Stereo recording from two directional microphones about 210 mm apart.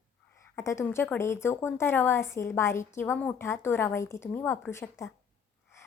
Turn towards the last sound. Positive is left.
turn(degrees=15)  # may be behind; listen again after turning